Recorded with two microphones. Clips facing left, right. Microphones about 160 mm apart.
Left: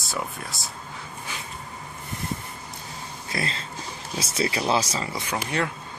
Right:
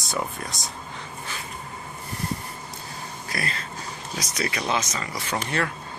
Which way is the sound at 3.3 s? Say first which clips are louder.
Left 2 dB; 25° left (ahead or behind).